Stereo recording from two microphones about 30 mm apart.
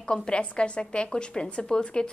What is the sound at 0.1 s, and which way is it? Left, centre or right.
A woman's voice, left.